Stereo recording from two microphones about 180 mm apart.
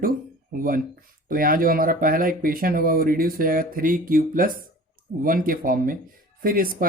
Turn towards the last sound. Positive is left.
turn(degrees=-55)  # may be behind; listen again after turning